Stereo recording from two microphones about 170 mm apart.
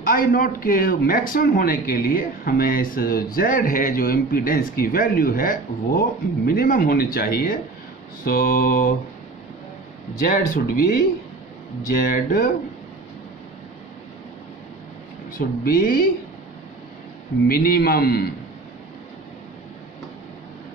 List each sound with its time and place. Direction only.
0.0 s a man's voice: 55° left (ahead or behind)
10.2 s a man's voice: 60° left (ahead or behind)
11.9 s a man's voice: 55° left (ahead or behind)
15.3 s a man's voice: 55° left (ahead or behind)
17.5 s a man's voice: 60° left (ahead or behind)